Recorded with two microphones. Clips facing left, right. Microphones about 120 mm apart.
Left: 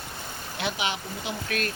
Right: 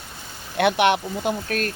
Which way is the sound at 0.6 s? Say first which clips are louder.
Right 12 dB; 60° right (ahead or behind).